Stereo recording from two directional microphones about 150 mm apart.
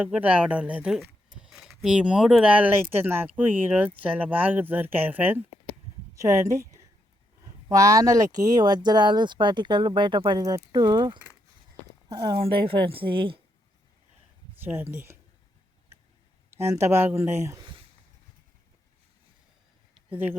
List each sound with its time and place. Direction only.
0.0 s a woman's voice: 10° right (ahead or behind); by 13.4 s 35° right (ahead or behind)
14.6 s speech: 15° right (ahead or behind)
16.5 s speech: 20° right (ahead or behind)
19.9 s a sound: 10° right (ahead or behind)